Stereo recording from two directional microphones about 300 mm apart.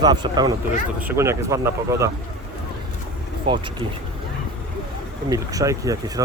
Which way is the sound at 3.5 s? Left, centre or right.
Centre.